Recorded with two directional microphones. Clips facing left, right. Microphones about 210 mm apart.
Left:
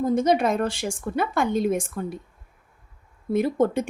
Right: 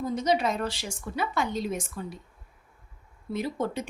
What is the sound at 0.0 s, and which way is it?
Speech, 50° left (ahead or behind).